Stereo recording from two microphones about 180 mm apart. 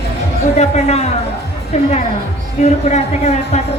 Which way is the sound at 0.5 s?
40° left (ahead or behind).